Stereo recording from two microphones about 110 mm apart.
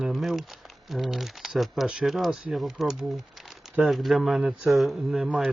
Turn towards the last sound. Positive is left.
turn(degrees=-5)  # may be behind; listen again after turning